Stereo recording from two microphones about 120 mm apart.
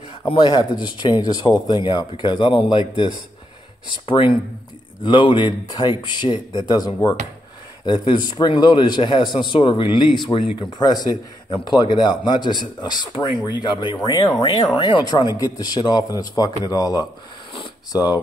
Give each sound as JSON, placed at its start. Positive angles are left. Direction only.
{"t": 0.3, "sound": "a man's voice", "side_deg": 40}